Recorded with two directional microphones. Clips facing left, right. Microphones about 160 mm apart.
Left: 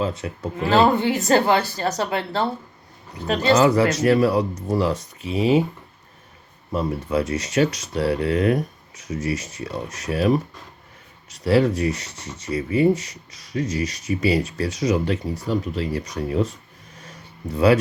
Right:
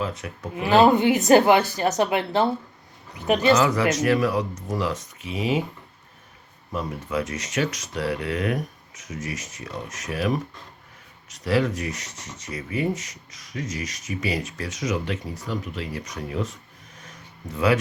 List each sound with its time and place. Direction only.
0.0 s speech: 30° left (ahead or behind)
0.5 s a woman's voice: 20° right (ahead or behind)
3.4 s speech: 30° left (ahead or behind)
6.7 s speech: 30° left (ahead or behind)
17.0 s a sound: 30° left (ahead or behind)